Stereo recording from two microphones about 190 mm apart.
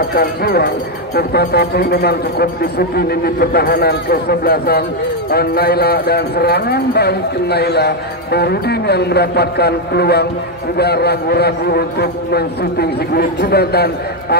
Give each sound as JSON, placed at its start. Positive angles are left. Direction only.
{"t": 0.1, "sound": "a man's voice", "side_deg": 55}